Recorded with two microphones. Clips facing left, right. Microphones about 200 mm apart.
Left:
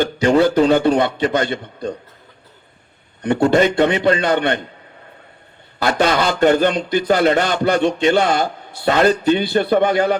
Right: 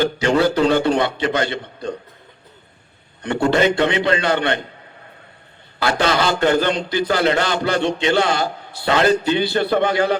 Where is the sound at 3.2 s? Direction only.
50° left (ahead or behind).